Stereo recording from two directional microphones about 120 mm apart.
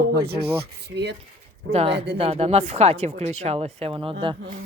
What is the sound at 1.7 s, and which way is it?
Speech, 55° right (ahead or behind).